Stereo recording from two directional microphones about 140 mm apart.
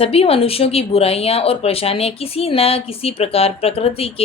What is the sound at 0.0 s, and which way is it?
Speech, 45° left (ahead or behind).